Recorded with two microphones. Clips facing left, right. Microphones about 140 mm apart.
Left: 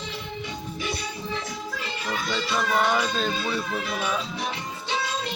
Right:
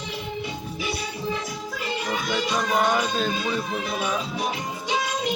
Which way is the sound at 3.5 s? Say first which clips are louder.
Right 1 dB; 15° right (ahead or behind).